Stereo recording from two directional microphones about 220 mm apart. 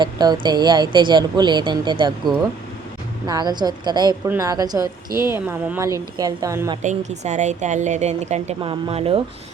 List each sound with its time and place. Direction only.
0.0 s a woman's voice: 20° right (ahead or behind)
6.8 s a woman's voice: 30° right (ahead or behind)